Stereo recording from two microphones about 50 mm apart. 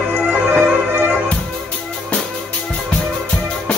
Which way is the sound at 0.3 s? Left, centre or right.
Right.